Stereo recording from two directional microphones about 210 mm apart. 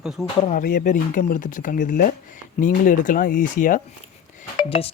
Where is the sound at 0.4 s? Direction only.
40° left (ahead or behind).